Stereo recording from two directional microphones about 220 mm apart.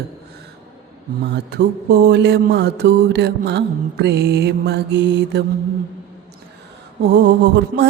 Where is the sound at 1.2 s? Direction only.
50° right (ahead or behind).